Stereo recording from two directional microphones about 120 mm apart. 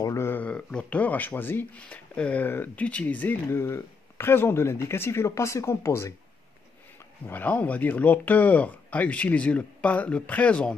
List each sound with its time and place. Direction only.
0.0 s speech: 25° left (ahead or behind)
7.2 s speech: 15° left (ahead or behind)